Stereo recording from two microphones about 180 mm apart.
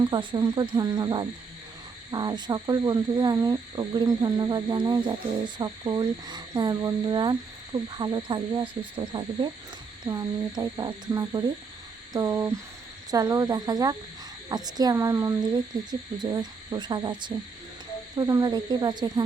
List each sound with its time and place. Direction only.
0.0 s speech: 25° right (ahead or behind)